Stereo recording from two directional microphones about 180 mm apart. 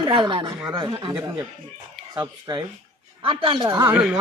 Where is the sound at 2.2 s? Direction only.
20° right (ahead or behind).